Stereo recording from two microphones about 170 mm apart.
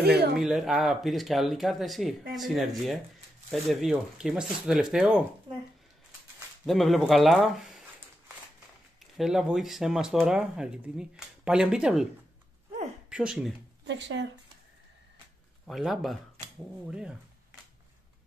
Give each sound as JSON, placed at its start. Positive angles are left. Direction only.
{"t": 0.0, "sound": "speech", "side_deg": -70}
{"t": 0.4, "sound": "speech", "side_deg": -5}
{"t": 6.6, "sound": "speech", "side_deg": 0}
{"t": 9.0, "sound": "speech", "side_deg": 0}
{"t": 13.1, "sound": "speech", "side_deg": -5}
{"t": 13.8, "sound": "speech", "side_deg": -90}
{"t": 15.6, "sound": "speech", "side_deg": 0}